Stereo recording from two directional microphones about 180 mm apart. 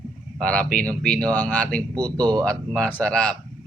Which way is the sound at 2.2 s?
25° right (ahead or behind).